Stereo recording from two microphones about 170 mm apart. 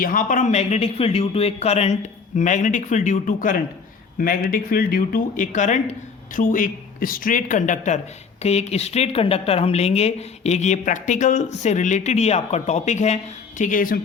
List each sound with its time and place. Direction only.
0.0 s speech: 55° left (ahead or behind)
13.6 s speech: 55° left (ahead or behind)